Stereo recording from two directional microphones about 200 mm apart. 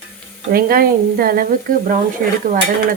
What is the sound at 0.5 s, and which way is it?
Speech, 45° right (ahead or behind).